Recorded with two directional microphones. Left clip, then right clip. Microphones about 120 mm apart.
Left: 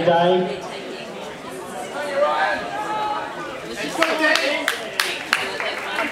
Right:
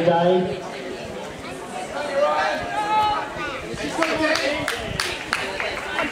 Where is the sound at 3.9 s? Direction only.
25° left (ahead or behind).